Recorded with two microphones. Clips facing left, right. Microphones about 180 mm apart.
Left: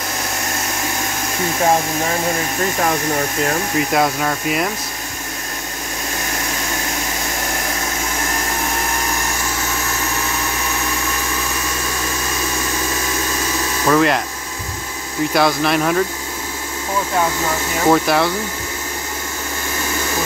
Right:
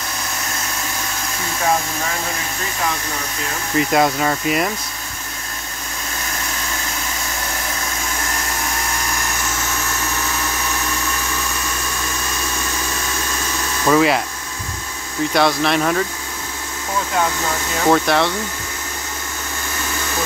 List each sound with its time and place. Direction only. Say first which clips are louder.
1.6 s speech: left 3 dB; 35° left (ahead or behind)
2.8 s speech: left 5 dB; 50° left (ahead or behind)
3.9 s speech: right 2 dB; centre (ahead or behind)
13.8 s speech: even; 5° right (ahead or behind)
15.3 s speech: even; centre (ahead or behind)
17.7 s speech: left 1 dB; 5° left (ahead or behind)